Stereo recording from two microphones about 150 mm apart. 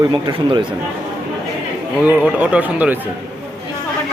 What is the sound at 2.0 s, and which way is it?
Speech, 10° right (ahead or behind).